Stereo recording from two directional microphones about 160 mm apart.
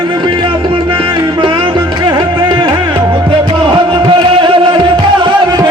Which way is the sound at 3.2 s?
30° right (ahead or behind).